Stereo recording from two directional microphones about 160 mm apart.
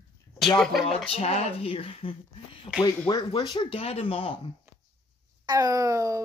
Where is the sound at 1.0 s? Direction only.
40° left (ahead or behind).